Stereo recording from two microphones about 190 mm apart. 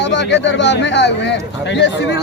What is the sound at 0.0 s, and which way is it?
Speech, 70° left (ahead or behind).